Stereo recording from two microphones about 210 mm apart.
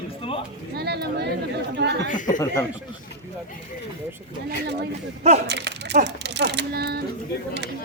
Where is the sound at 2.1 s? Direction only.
40° left (ahead or behind).